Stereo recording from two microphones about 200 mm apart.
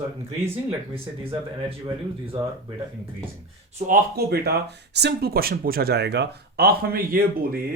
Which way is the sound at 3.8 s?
45° right (ahead or behind).